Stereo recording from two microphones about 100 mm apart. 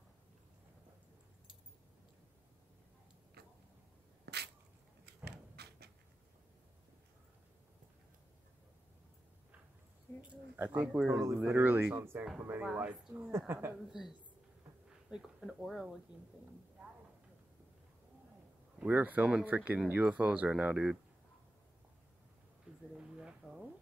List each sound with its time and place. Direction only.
10.3 s speech: 15° right (ahead or behind)
13.1 s speech: 25° right (ahead or behind)
14.9 s speech: 5° right (ahead or behind)
18.8 s speech: 15° right (ahead or behind)
22.9 s a sound: 5° right (ahead or behind)